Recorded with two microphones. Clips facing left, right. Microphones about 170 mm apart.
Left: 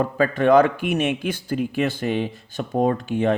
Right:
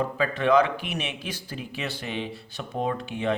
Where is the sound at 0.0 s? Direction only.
45° left (ahead or behind).